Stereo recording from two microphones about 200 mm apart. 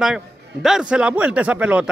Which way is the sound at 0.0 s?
Centre (ahead or behind).